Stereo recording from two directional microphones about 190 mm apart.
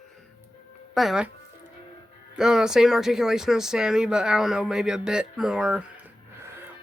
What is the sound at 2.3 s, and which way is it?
Speech, 5° right (ahead or behind).